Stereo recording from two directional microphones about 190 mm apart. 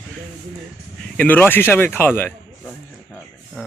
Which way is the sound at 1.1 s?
10° left (ahead or behind).